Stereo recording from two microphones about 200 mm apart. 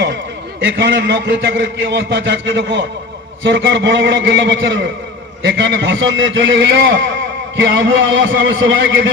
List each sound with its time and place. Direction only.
0.6 s a man's voice: 65° right (ahead or behind)